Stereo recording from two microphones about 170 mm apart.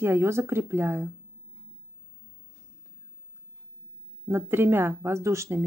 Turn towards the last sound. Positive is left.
turn(degrees=-20)  # may be behind; listen again after turning